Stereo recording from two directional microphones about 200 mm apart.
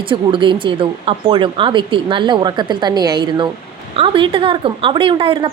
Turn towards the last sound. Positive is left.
turn(degrees=-25)  # may be behind; listen again after turning